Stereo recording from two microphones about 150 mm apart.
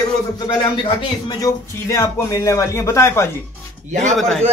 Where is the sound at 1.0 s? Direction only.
25° left (ahead or behind).